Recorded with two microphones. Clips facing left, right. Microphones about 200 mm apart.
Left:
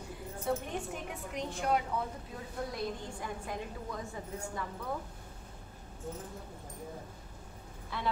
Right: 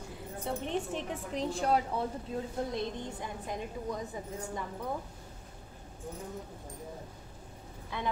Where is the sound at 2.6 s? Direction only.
20° right (ahead or behind).